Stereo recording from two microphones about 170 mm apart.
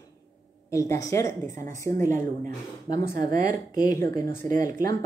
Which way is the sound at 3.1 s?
55° right (ahead or behind).